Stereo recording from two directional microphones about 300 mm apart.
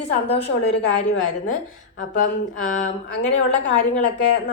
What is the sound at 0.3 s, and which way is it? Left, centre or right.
Speech, centre.